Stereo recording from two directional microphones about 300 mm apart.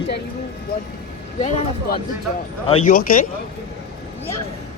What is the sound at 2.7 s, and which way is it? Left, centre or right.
Speech, left.